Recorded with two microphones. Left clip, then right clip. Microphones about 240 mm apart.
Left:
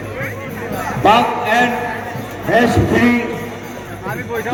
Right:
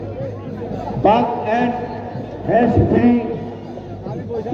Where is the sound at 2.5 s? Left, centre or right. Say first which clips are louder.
Left 2 dB; left.